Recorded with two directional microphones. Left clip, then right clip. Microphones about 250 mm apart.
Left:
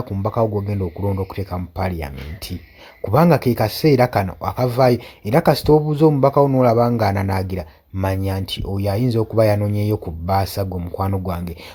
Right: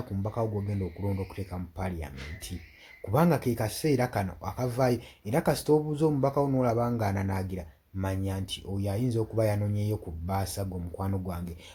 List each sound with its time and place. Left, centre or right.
0.2 s speech: left
3.1 s speech: left